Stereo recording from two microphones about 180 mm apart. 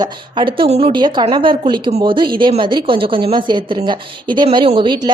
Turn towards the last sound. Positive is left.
turn(degrees=-30)  # may be behind; listen again after turning